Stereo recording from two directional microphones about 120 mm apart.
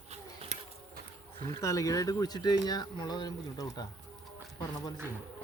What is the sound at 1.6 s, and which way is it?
Speech, 25° left (ahead or behind).